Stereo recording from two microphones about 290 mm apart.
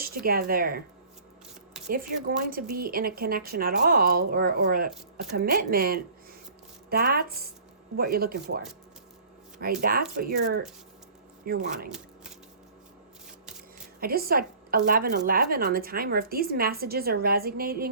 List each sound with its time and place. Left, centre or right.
0.3 s a woman's voice: right
1.9 s a woman's voice: right
9.8 s a woman's voice: right
14.0 s a woman's voice: right